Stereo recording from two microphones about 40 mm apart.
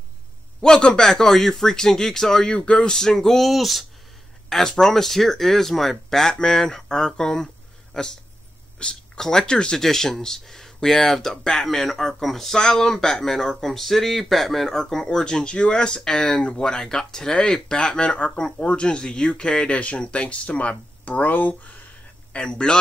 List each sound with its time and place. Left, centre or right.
0.6 s speech: centre
3.4 s speech: centre
4.5 s speech: centre
8.7 s a sound: left
9.2 s speech: centre
9.8 s speech: centre
19.7 s speech: left
21.2 s speech: left
22.3 s speech: left